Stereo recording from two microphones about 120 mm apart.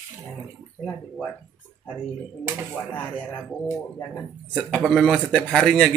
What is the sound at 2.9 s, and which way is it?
Speech, 15° left (ahead or behind).